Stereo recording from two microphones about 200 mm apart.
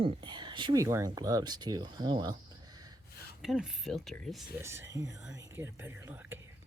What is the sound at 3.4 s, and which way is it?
Speech, centre (ahead or behind).